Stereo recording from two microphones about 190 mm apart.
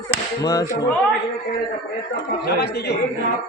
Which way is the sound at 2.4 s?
60° left (ahead or behind).